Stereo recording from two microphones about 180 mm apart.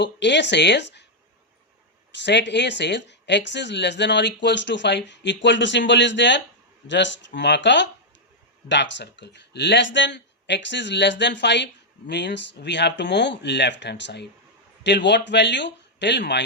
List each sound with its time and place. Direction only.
0.0 s speech: 75° left (ahead or behind)
2.1 s speech: 75° left (ahead or behind)